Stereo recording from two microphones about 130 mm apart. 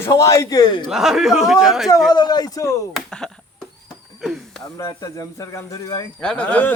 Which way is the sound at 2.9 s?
5° left (ahead or behind).